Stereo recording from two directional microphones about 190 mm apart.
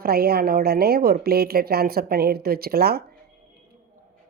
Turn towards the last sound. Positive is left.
turn(degrees=-55)  # may be behind; listen again after turning